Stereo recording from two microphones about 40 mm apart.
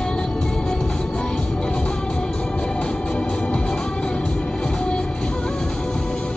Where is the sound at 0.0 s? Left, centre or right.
Left.